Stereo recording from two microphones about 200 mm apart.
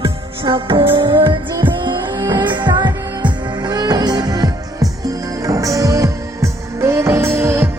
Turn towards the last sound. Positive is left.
turn(degrees=-10)  # may be behind; listen again after turning